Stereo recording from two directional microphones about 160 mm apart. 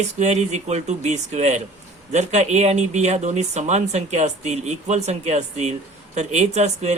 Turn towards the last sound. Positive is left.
turn(degrees=-45)  # may be behind; listen again after turning